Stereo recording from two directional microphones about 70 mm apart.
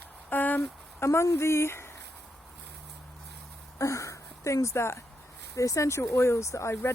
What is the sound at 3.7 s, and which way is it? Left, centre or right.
Speech, left.